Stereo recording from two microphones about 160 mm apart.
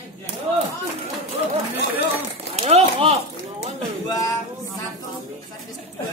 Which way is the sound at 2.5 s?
40° right (ahead or behind).